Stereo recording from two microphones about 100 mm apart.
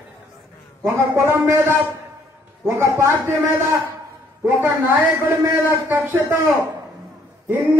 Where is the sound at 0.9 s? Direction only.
25° right (ahead or behind).